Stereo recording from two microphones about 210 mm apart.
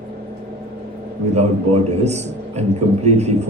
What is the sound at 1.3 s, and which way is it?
Speech, 30° right (ahead or behind).